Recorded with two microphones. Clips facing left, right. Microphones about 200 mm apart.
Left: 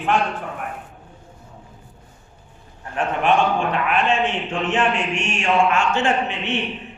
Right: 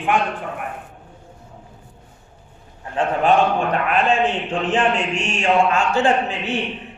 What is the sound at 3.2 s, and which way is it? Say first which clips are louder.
A man's voice: right 1 dB; 40° right (ahead or behind).